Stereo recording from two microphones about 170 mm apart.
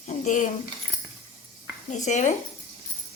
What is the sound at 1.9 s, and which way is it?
Speech, 45° left (ahead or behind).